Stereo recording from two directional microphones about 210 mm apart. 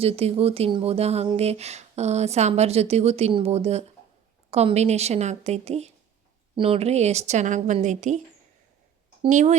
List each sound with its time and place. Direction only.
0.0 s a woman's voice: 30° right (ahead or behind)
9.2 s a woman's voice: 35° right (ahead or behind)